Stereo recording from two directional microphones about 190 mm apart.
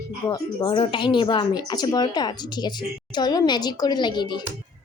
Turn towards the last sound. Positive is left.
turn(degrees=25)  # may be behind; listen again after turning